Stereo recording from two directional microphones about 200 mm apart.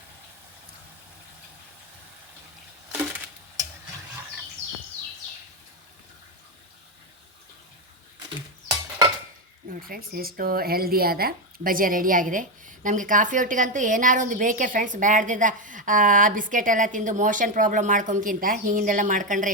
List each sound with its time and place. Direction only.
9.6 s speech: 45° right (ahead or behind)